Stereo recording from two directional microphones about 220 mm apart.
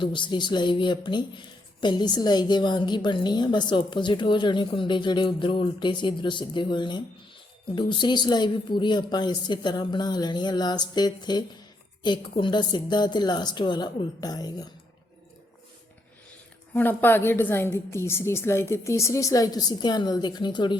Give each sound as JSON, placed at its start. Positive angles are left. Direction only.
{"t": 0.0, "sound": "speech", "side_deg": 20}
{"t": 16.7, "sound": "a woman's voice", "side_deg": 10}